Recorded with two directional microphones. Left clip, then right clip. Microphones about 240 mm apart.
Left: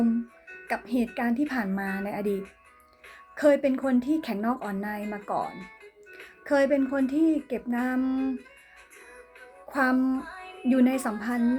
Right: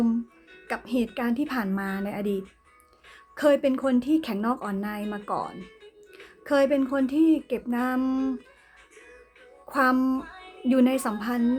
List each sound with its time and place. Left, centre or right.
0.7 s speech: centre
9.6 s speech: centre